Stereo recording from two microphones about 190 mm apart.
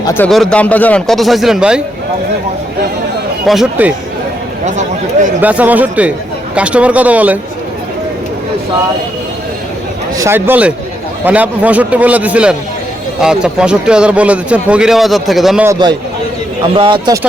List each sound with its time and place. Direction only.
0.3 s speech: 5° left (ahead or behind)
3.4 s speech: centre (ahead or behind)
5.4 s a man's voice: 10° right (ahead or behind)
10.2 s a man's voice: 10° right (ahead or behind)
15.6 s speech: 20° right (ahead or behind)